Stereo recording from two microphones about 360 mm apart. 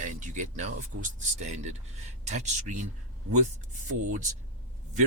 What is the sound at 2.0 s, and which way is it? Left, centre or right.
Speech, centre.